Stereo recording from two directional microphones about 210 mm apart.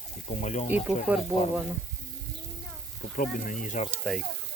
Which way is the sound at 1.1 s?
10° right (ahead or behind).